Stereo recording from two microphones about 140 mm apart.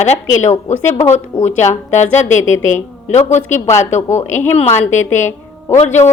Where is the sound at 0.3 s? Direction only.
20° left (ahead or behind).